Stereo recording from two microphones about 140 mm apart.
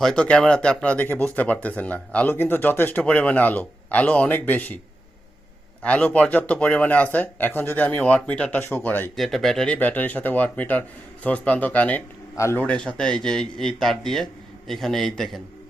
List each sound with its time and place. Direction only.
0.0 s speech: 5° left (ahead or behind)
5.8 s speech: 10° left (ahead or behind)
9.1 s a man's voice: centre (ahead or behind); by 12.6 s 20° left (ahead or behind)
12.6 s speech: 5° left (ahead or behind)